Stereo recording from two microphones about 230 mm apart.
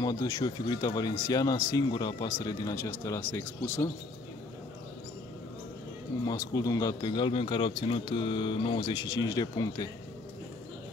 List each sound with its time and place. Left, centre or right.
0.0 s speech: centre
6.2 s speech: centre